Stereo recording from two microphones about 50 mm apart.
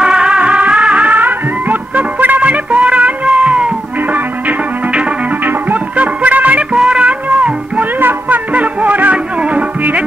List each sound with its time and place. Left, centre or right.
0.0 s music: centre
4.1 s music: right
6.7 s music: right
8.0 s music: right
8.5 s music: right